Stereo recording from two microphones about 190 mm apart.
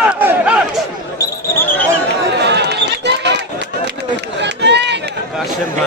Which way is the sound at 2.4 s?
65° right (ahead or behind).